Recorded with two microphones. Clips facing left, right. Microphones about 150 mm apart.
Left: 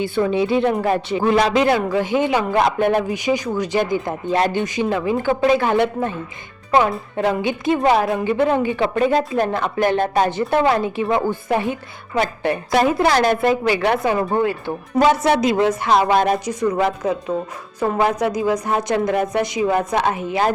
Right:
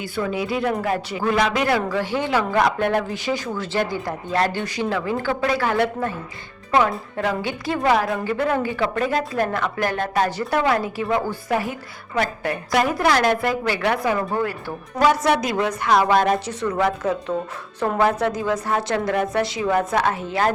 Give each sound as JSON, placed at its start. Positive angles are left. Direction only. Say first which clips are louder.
{"t": 0.0, "sound": "a woman's voice", "louder": "left 6 dB", "side_deg": 25}
{"t": 18.0, "sound": "a woman's voice", "louder": "left 1 dB", "side_deg": 15}